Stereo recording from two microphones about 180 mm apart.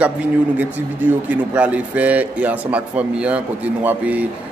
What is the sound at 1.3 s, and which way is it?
A man's voice, 10° right (ahead or behind).